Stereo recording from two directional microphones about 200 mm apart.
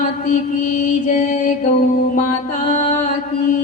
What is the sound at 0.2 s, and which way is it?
Mantra, 40° left (ahead or behind).